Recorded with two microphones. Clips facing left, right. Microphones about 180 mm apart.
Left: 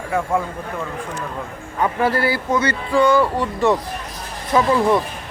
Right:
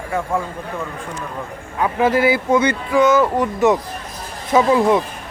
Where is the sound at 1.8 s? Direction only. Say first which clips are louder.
Right 3 dB; 15° right (ahead or behind).